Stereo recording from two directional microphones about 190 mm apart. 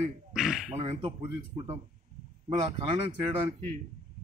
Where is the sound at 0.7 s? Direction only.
30° right (ahead or behind).